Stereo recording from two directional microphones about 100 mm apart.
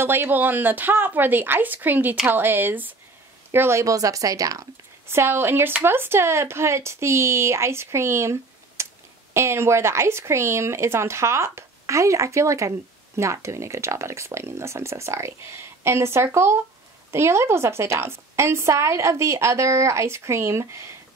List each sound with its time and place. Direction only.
0.0 s speech: 20° right (ahead or behind)